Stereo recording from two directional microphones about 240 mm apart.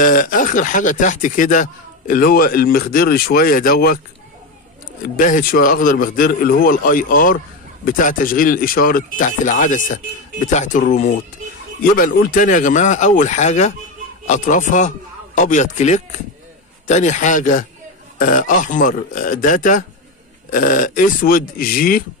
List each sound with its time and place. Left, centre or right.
0.0 s speech: left
5.0 s speech: left